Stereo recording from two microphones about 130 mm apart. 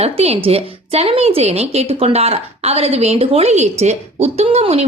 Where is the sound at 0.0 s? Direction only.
50° right (ahead or behind).